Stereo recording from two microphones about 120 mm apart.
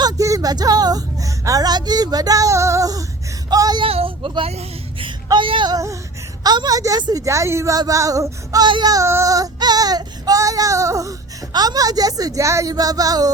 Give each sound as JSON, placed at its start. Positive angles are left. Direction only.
{"t": 0.0, "sound": "a woman's voice", "side_deg": -25}
{"t": 3.8, "sound": "a woman's voice", "side_deg": -50}
{"t": 6.4, "sound": "child singing", "side_deg": -35}
{"t": 8.6, "sound": "child singing", "side_deg": -40}
{"t": 11.5, "sound": "a woman's voice", "side_deg": -30}